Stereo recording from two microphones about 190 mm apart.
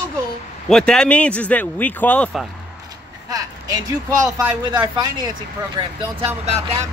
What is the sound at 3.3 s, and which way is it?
Speech, 20° right (ahead or behind).